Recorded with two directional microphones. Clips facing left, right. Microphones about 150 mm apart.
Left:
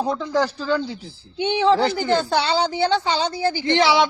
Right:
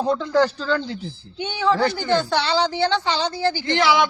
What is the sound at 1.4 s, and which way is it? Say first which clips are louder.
Speech: left 3 dB; 25° left (ahead or behind).